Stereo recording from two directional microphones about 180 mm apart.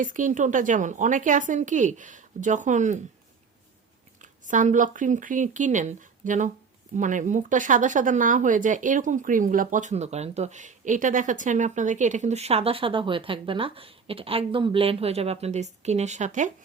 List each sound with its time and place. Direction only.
0.0 s speech: 45° right (ahead or behind)
4.2 s speech: 45° right (ahead or behind)